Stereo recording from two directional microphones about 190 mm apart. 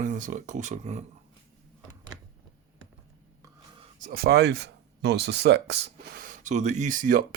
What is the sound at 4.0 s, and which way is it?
Speech, 55° right (ahead or behind).